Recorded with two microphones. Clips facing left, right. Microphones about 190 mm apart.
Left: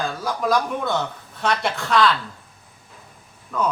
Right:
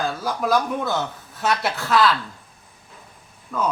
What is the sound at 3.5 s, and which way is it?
Speech, centre (ahead or behind).